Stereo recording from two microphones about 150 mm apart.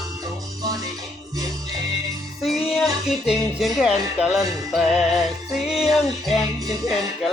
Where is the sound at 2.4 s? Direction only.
Centre (ahead or behind).